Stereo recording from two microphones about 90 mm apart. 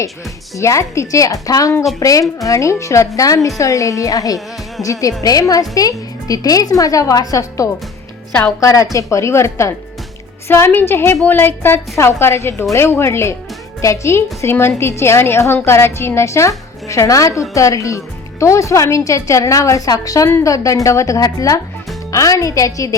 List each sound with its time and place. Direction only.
0.5 s speech: 35° left (ahead or behind)
8.3 s a woman's voice: 15° left (ahead or behind)
8.6 s a woman's voice: 35° left (ahead or behind)